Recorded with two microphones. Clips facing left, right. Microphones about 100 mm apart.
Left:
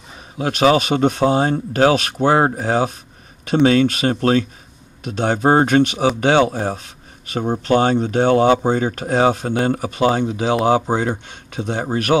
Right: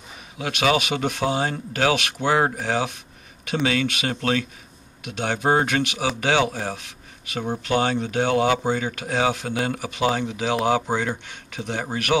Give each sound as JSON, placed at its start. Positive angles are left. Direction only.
{"t": 0.4, "sound": "speech", "side_deg": 40}